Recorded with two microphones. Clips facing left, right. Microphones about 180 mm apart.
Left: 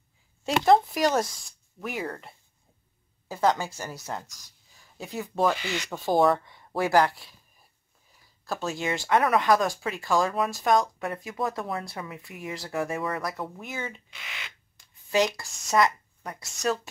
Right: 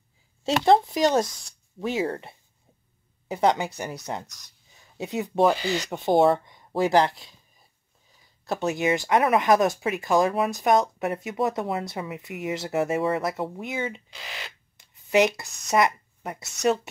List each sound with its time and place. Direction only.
0.5 s speech: 25° right (ahead or behind)
5.9 s speech: 25° right (ahead or behind)
8.5 s speech: 20° right (ahead or behind)
14.1 s speech: 35° right (ahead or behind)
14.8 s a sound: 20° right (ahead or behind)
15.7 s speech: 20° right (ahead or behind)